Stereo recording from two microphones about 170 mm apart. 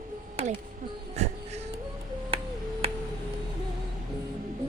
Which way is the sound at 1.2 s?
40° right (ahead or behind).